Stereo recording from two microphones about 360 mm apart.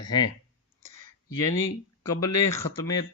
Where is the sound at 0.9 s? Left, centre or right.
Left.